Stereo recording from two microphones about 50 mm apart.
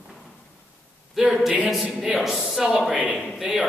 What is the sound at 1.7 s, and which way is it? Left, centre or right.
Speech, centre.